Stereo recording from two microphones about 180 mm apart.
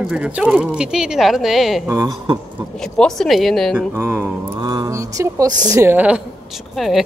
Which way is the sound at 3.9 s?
15° right (ahead or behind).